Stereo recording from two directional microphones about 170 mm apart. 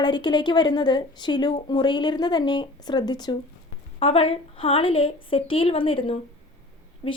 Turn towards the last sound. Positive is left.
turn(degrees=30)  # may be behind; listen again after turning